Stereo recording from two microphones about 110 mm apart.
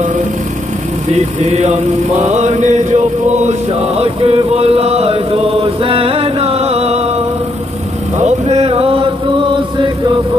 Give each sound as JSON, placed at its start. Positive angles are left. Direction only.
{"t": 1.4, "sound": "chant", "side_deg": -90}
{"t": 4.0, "sound": "chant", "side_deg": -65}
{"t": 8.2, "sound": "a sound", "side_deg": -75}
{"t": 8.6, "sound": "chant", "side_deg": -60}